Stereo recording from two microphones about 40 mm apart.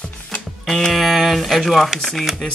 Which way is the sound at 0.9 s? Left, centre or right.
Centre.